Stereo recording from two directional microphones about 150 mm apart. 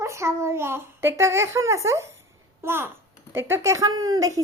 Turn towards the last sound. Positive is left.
turn(degrees=-25)  # may be behind; listen again after turning